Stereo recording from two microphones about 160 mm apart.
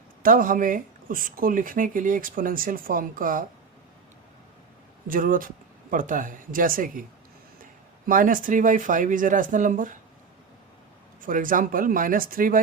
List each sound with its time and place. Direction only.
0.2 s speech: 60° right (ahead or behind)
5.0 s speech: 60° right (ahead or behind)
11.2 s speech: 55° right (ahead or behind)